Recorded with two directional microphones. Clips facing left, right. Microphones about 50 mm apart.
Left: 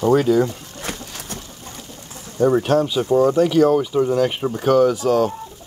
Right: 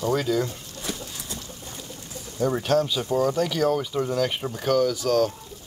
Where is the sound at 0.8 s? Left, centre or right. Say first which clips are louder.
Left 3 dB; left.